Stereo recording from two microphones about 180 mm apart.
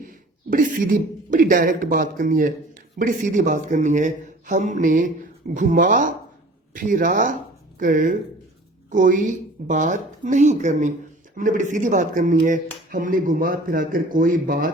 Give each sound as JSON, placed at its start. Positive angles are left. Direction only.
{"t": 0.0, "sound": "speech", "side_deg": -50}